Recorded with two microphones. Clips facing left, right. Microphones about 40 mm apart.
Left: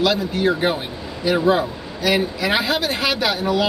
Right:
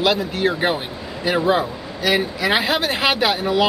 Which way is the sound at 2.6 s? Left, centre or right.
Right.